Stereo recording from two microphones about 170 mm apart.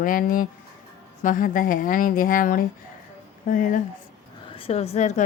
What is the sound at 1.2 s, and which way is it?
Music, 50° left (ahead or behind).